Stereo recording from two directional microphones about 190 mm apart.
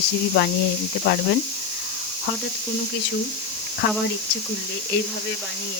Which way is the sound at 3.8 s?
65° left (ahead or behind).